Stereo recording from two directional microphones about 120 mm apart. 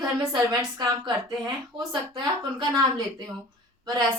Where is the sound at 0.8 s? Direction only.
40° right (ahead or behind).